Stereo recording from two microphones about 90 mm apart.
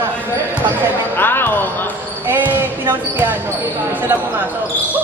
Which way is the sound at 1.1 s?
25° left (ahead or behind).